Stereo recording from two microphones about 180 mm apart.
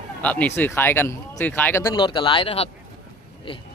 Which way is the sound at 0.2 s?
10° left (ahead or behind).